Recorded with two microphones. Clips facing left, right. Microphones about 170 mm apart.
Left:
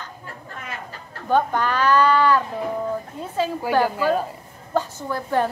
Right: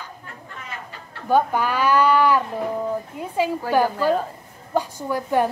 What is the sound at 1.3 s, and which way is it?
A woman's voice, 10° right (ahead or behind).